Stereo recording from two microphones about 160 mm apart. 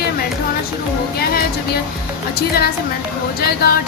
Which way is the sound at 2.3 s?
75° left (ahead or behind).